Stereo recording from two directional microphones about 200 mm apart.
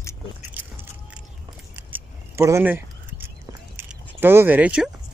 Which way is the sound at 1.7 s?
10° right (ahead or behind).